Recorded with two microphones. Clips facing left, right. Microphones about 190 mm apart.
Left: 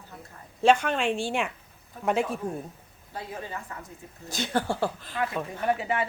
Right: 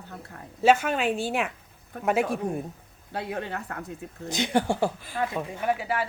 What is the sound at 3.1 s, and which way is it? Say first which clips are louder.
Speech: right 5 dB; 70° right (ahead or behind).